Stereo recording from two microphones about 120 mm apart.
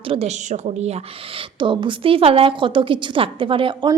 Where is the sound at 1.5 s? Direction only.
45° right (ahead or behind).